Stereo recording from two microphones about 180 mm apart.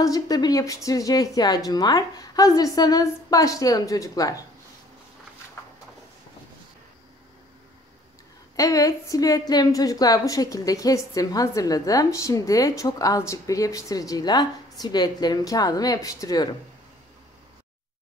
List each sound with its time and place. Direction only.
0.0 s a woman's voice: 20° left (ahead or behind)
8.5 s a woman's voice: 20° left (ahead or behind)